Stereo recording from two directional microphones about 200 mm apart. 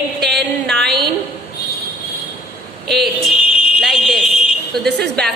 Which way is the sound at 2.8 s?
Centre (ahead or behind).